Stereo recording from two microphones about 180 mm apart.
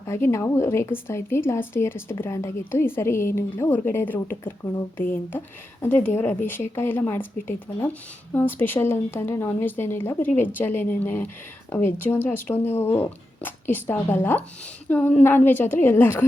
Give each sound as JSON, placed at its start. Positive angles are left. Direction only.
{"t": 0.0, "sound": "speech", "side_deg": 15}
{"t": 5.8, "sound": "speech", "side_deg": 10}
{"t": 8.3, "sound": "speech", "side_deg": 10}